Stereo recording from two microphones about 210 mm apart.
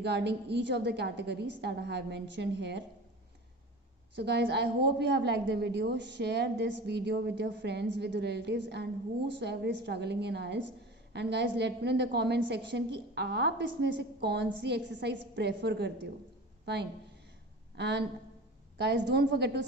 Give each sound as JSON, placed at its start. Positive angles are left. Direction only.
{"t": 0.0, "sound": "a woman's voice", "side_deg": -55}
{"t": 4.1, "sound": "a woman's voice", "side_deg": -55}
{"t": 17.7, "sound": "a woman's voice", "side_deg": -55}